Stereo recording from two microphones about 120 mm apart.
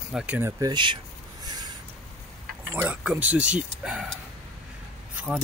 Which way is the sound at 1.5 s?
35° right (ahead or behind).